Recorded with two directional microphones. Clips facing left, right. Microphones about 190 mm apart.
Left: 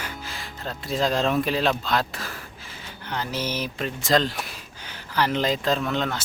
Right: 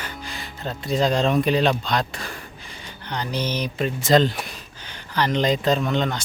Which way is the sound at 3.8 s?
Centre (ahead or behind).